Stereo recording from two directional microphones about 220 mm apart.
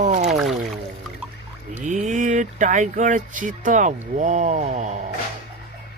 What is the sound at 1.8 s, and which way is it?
Speech, 35° right (ahead or behind).